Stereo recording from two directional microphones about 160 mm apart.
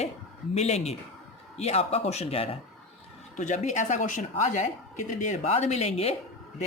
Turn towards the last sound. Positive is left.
turn(degrees=40)  # may be behind; listen again after turning